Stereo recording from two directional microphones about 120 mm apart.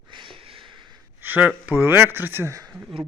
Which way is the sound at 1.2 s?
15° right (ahead or behind).